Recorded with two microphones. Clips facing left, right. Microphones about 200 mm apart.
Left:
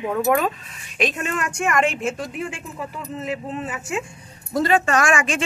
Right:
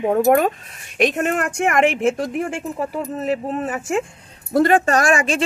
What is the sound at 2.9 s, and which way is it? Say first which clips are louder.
Speech: right 4 dB; 45° right (ahead or behind).